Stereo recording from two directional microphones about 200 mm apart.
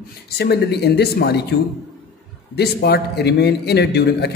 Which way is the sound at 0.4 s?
55° left (ahead or behind).